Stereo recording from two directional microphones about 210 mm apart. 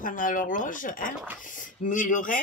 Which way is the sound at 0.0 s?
40° left (ahead or behind).